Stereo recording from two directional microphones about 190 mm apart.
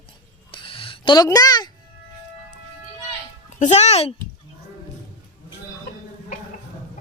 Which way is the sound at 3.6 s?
35° left (ahead or behind).